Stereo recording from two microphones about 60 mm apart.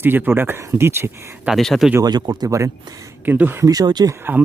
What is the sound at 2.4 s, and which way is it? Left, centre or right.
Speech, right.